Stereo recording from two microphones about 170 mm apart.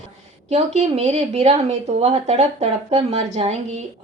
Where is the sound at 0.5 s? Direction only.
40° right (ahead or behind).